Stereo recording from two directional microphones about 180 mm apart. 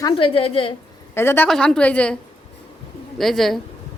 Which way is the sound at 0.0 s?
30° left (ahead or behind).